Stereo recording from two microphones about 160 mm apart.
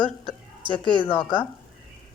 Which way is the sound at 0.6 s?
30° right (ahead or behind).